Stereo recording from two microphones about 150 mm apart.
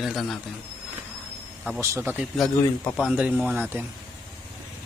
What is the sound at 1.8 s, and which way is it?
Speech, 15° right (ahead or behind).